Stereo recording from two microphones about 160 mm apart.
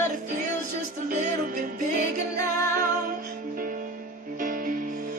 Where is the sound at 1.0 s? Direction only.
55° right (ahead or behind).